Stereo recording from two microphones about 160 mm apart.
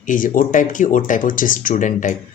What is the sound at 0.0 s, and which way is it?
Speech, 55° left (ahead or behind).